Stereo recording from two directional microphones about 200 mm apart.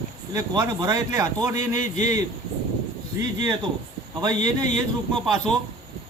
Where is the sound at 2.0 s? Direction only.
35° left (ahead or behind).